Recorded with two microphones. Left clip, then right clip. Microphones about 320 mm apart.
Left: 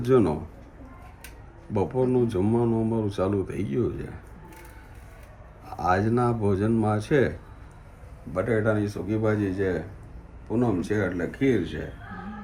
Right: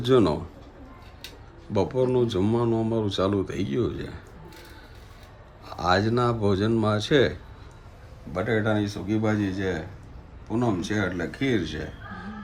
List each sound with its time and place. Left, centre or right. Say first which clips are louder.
0.0 s speech: right 1 dB; centre
1.7 s speech: right 1 dB; centre
5.6 s speech: right 1 dB; centre